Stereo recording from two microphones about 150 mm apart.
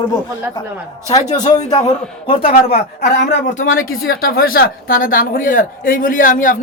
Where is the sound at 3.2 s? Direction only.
70° left (ahead or behind).